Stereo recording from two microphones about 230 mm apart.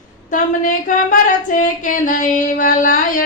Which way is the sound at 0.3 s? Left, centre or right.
Left.